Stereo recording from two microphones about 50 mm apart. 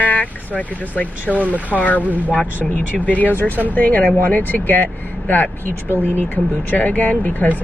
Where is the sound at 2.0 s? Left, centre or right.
Right.